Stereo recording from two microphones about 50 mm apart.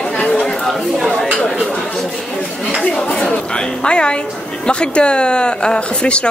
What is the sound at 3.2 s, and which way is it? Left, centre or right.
Speech, centre.